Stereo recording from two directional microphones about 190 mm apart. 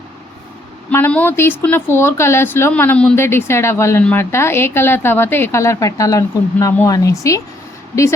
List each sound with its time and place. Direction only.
0.9 s speech: 10° left (ahead or behind)